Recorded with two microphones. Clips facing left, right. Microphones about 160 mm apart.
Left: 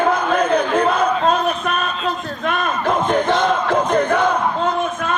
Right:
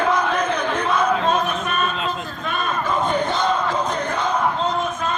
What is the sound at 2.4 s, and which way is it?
Battle cry, 90° left.